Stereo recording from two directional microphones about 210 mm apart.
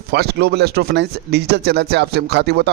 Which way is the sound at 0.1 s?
50° right (ahead or behind).